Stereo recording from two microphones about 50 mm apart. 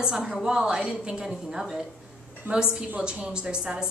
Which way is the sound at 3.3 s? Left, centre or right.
Centre.